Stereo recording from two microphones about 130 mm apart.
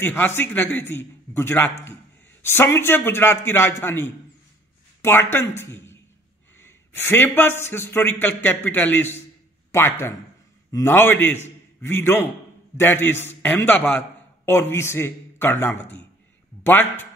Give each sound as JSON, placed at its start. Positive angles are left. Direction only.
{"t": 0.0, "sound": "a man's voice", "side_deg": 15}